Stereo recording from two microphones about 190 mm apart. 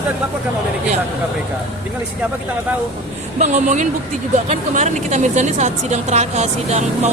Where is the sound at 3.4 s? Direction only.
40° right (ahead or behind).